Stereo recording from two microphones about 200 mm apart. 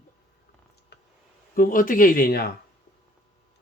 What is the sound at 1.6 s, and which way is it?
Speech, 45° left (ahead or behind).